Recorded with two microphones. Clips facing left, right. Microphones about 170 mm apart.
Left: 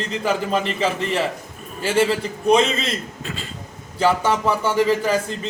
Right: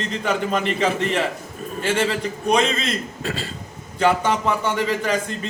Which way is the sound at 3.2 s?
35° right (ahead or behind).